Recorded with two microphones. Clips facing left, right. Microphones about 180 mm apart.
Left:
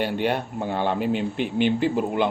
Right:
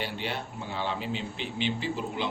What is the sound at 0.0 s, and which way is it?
Speech, 55° left (ahead or behind).